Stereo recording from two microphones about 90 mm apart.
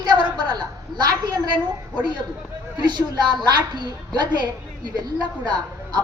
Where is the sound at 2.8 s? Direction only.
55° right (ahead or behind).